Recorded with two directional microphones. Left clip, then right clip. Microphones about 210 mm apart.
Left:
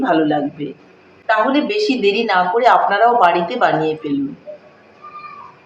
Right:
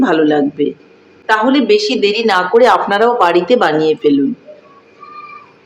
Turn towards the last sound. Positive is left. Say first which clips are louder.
# right 4 dB
turn(degrees=-45)  # may be behind; listen again after turning